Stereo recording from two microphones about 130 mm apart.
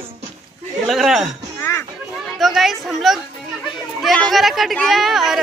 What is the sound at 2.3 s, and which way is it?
Chatter, centre (ahead or behind).